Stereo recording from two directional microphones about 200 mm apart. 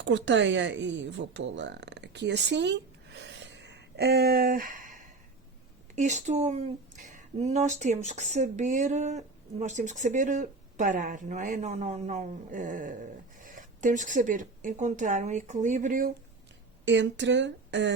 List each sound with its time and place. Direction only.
0.0 s speech: 65° right (ahead or behind); by 4.9 s 40° right (ahead or behind)
6.0 s speech: 35° right (ahead or behind)
16.8 s speech: 65° right (ahead or behind)